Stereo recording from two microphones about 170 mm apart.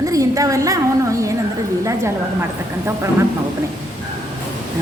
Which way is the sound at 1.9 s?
15° right (ahead or behind).